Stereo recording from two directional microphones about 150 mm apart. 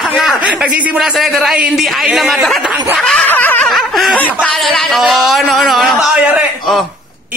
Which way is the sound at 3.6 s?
Centre (ahead or behind).